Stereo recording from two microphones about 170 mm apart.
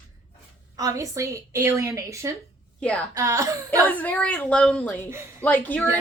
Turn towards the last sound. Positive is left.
turn(degrees=10)  # may be behind; listen again after turning